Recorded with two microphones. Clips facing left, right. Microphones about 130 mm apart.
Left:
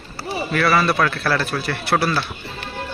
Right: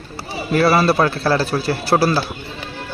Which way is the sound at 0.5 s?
30° right (ahead or behind).